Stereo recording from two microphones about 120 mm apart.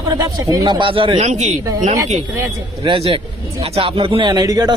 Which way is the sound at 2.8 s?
50° right (ahead or behind).